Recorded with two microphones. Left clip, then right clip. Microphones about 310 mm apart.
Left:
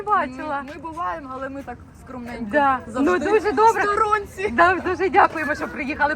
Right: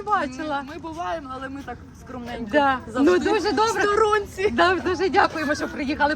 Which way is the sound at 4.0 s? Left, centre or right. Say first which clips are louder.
Even; centre.